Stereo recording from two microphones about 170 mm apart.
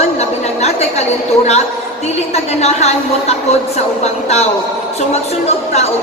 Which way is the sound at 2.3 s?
40° left (ahead or behind).